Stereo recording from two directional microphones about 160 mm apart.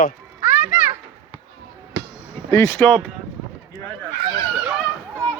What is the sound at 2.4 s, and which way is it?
Speech, 15° left (ahead or behind).